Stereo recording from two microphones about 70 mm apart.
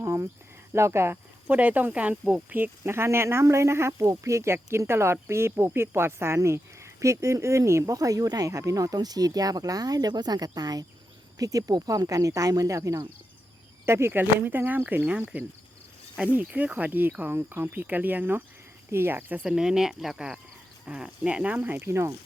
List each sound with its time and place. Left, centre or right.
0.0 s cricket: right
0.7 s speech: right
1.5 s speech: right
2.6 s speech: right
7.9 s speech: right
13.8 s speech: right
19.4 s speech: centre; by 21.8 s right
21.8 s speech: right